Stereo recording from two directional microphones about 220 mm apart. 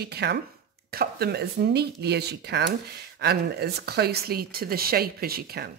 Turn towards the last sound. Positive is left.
turn(degrees=-45)  # may be behind; listen again after turning